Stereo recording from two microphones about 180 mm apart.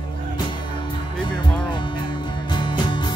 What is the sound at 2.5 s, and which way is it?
Music, 25° left (ahead or behind).